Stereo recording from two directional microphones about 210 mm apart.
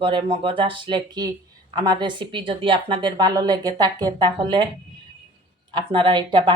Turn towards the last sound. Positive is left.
turn(degrees=-20)  # may be behind; listen again after turning